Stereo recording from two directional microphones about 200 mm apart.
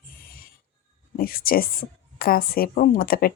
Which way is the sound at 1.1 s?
45° left (ahead or behind).